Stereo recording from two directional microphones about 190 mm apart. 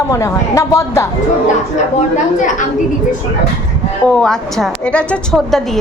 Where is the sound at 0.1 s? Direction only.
15° left (ahead or behind).